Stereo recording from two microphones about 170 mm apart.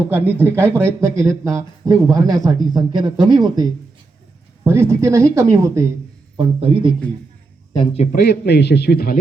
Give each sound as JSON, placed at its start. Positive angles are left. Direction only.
{"t": 0.1, "sound": "speech", "side_deg": -10}
{"t": 6.3, "sound": "speech", "side_deg": -35}
{"t": 8.1, "sound": "a man's voice", "side_deg": 75}